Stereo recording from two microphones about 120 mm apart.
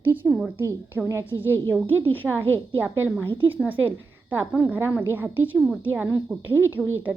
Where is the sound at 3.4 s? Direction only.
15° right (ahead or behind).